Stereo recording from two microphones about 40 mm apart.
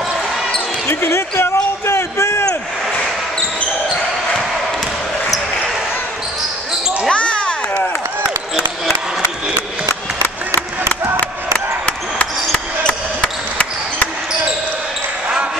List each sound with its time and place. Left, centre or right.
0.8 s speech: left
2.0 s basketball bounce: left
7.1 s basketball bounce: left
12.8 s a sound: left